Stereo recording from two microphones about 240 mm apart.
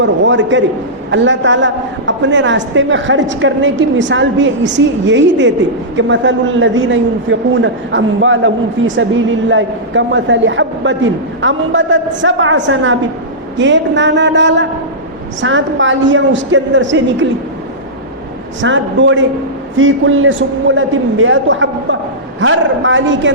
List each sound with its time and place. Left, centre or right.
0.0 s a man's voice: right
18.6 s a man's voice: right